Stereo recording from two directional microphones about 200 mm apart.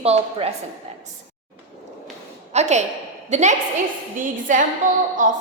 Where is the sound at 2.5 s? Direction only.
35° right (ahead or behind).